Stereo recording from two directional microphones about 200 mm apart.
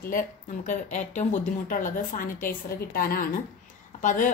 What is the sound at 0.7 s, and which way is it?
A woman's voice, 35° left (ahead or behind).